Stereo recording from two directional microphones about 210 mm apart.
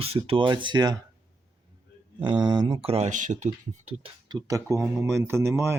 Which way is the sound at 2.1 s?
20° right (ahead or behind).